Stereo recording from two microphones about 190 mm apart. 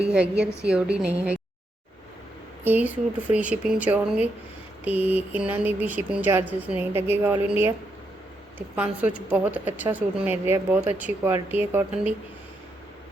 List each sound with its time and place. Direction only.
0.0 s a woman's voice: 5° right (ahead or behind)
2.6 s speech: 10° right (ahead or behind)